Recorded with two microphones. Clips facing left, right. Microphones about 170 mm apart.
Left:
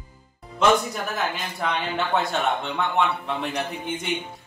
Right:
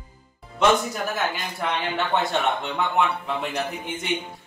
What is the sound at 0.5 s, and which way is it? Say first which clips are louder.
Speech: even; centre (ahead or behind).